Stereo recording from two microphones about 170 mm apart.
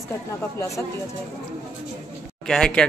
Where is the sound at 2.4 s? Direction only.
5° left (ahead or behind).